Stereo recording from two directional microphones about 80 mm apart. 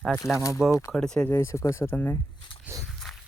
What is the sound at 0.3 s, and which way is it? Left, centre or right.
Speech, left.